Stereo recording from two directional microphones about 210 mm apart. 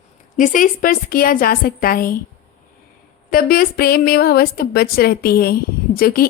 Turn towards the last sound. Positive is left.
turn(degrees=45)  # may be behind; listen again after turning